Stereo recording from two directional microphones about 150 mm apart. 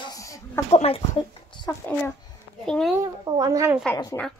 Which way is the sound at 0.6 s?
45° left (ahead or behind).